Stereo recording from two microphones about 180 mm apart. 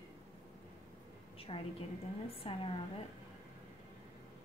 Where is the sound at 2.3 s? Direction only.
30° left (ahead or behind).